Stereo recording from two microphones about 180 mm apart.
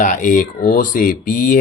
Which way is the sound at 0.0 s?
45° left (ahead or behind).